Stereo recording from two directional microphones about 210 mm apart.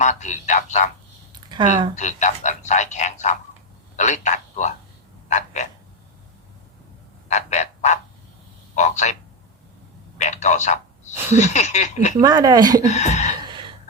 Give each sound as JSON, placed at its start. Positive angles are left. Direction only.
{"t": 0.0, "sound": "speech", "side_deg": 35}
{"t": 1.4, "sound": "a sound", "side_deg": -20}
{"t": 2.0, "sound": "a man's voice", "side_deg": 35}
{"t": 7.3, "sound": "frog", "side_deg": 35}
{"t": 8.7, "sound": "a man's voice", "side_deg": 35}
{"t": 10.2, "sound": "a sound", "side_deg": 35}
{"t": 11.3, "sound": "speech", "side_deg": 35}
{"t": 12.2, "sound": "speech", "side_deg": -15}
{"t": 12.8, "sound": "speech", "side_deg": 35}
{"t": 13.4, "sound": "a sound", "side_deg": -20}